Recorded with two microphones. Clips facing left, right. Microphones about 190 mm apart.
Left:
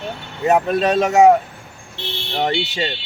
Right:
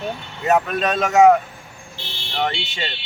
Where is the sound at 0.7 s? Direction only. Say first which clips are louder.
Left 4 dB; 30° left (ahead or behind).